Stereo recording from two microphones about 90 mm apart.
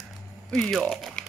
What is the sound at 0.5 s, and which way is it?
Speech, centre (ahead or behind).